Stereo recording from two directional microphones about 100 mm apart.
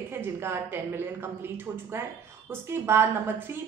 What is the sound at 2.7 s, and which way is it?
Speech, 25° right (ahead or behind).